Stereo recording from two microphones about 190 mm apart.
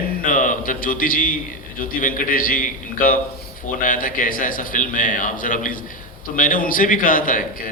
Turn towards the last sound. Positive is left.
turn(degrees=45)  # may be behind; listen again after turning